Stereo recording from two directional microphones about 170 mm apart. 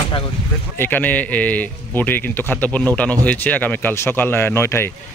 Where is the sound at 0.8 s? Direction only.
10° left (ahead or behind).